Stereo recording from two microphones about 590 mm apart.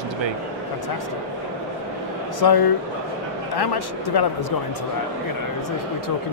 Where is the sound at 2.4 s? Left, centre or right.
Left.